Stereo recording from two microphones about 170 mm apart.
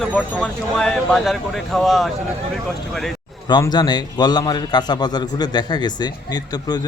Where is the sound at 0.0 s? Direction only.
5° left (ahead or behind).